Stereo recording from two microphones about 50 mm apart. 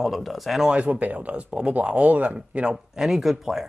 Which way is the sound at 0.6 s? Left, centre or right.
Right.